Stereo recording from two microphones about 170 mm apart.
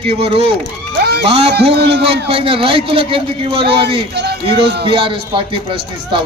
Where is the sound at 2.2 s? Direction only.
30° right (ahead or behind).